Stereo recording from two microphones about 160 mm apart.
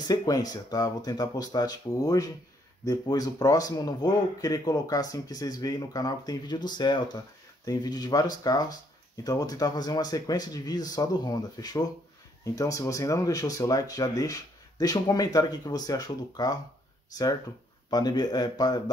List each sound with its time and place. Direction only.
0.1 s speech: 25° left (ahead or behind)
17.8 s speech: 25° left (ahead or behind)